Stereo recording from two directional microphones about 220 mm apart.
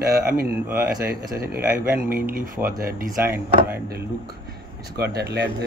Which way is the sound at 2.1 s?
40° right (ahead or behind).